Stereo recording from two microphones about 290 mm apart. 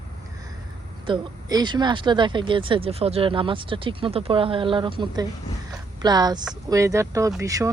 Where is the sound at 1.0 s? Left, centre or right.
Centre.